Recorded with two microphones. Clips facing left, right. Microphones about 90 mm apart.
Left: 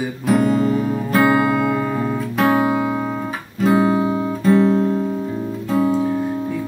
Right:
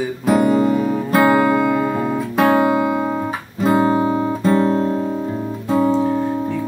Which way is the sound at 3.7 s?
40° right (ahead or behind).